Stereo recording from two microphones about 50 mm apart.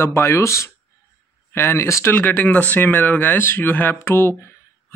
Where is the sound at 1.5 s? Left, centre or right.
Left.